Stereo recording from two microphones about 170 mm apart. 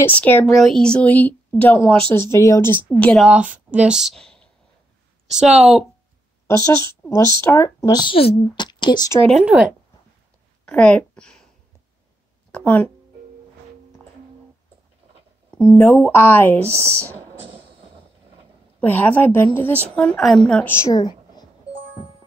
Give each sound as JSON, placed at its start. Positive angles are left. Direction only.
{"t": 0.0, "sound": "a woman's voice", "side_deg": 10}
{"t": 3.3, "sound": "a woman's voice", "side_deg": -5}
{"t": 7.4, "sound": "speech", "side_deg": 15}
{"t": 9.3, "sound": "a woman's voice", "side_deg": -5}
{"t": 10.6, "sound": "a woman's voice", "side_deg": 5}
{"t": 12.4, "sound": "speech", "side_deg": 10}
{"t": 15.5, "sound": "a woman's voice", "side_deg": 15}
{"t": 18.8, "sound": "a woman's voice", "side_deg": 10}
{"t": 20.8, "sound": "a sound", "side_deg": 25}